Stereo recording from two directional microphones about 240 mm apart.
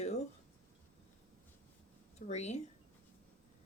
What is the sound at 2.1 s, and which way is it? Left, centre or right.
Speech, left.